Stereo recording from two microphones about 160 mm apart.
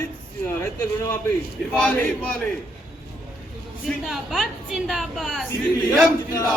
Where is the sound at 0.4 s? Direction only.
15° left (ahead or behind).